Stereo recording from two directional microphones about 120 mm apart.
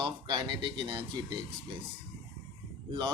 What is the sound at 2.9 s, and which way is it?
Speech, 45° right (ahead or behind).